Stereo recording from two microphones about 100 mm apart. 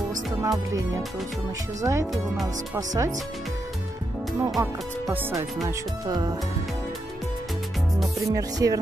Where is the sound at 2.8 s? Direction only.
30° right (ahead or behind).